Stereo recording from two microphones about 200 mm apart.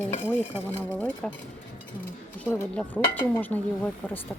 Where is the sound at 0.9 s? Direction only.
10° left (ahead or behind).